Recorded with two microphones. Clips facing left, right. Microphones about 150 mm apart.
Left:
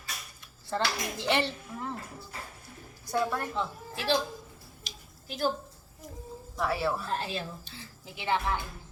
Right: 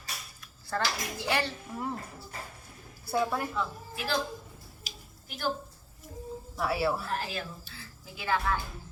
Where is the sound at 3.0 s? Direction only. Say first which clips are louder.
Right 1 dB; 10° right (ahead or behind).